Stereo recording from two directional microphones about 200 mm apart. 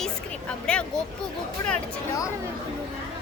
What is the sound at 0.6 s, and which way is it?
Speech, 5° left (ahead or behind).